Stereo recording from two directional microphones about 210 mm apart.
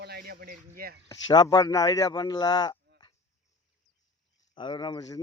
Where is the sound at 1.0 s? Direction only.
20° left (ahead or behind).